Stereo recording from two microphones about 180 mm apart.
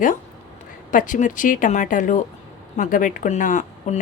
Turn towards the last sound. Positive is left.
turn(degrees=40)  # may be behind; listen again after turning